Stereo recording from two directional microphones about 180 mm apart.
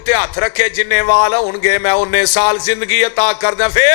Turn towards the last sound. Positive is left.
turn(degrees=20)  # may be behind; listen again after turning